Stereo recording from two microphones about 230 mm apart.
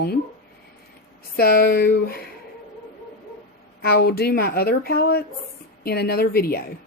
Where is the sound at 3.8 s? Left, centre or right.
Left.